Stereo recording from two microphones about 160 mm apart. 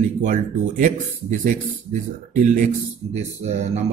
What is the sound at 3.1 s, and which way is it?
Speech, 45° right (ahead or behind).